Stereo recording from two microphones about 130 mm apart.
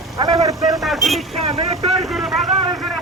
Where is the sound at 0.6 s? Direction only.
Centre (ahead or behind).